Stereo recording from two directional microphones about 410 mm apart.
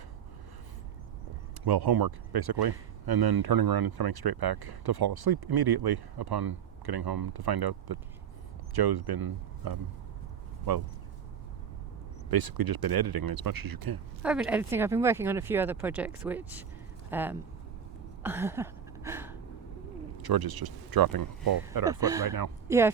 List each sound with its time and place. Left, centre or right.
1.6 s speech: right
12.3 s speech: right
14.2 s speech: centre
18.2 s a sound: centre
20.1 s speech: right
22.0 s speech: centre